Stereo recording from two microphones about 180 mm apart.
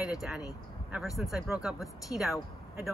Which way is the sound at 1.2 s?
Centre (ahead or behind).